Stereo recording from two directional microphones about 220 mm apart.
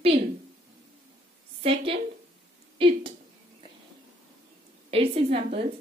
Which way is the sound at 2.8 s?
25° right (ahead or behind).